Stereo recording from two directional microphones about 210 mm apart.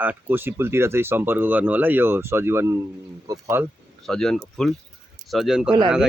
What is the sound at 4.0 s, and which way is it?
Speech, centre (ahead or behind).